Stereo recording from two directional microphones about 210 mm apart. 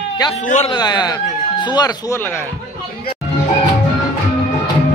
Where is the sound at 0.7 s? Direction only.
20° left (ahead or behind).